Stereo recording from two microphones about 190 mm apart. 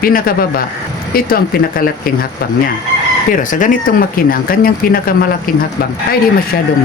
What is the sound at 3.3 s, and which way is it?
Speech, 45° left (ahead or behind).